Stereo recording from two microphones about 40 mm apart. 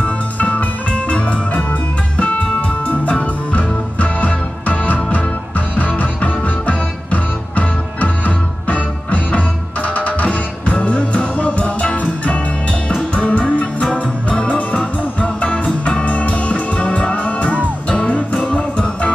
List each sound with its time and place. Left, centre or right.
0.0 s music: left